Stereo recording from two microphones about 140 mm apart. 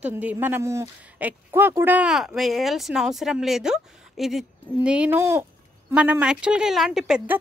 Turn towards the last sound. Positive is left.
turn(degrees=-5)  # may be behind; listen again after turning